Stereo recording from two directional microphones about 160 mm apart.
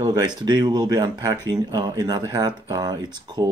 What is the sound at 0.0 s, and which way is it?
Speech, 25° right (ahead or behind).